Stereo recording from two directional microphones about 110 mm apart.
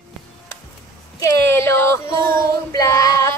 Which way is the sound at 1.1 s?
25° left (ahead or behind).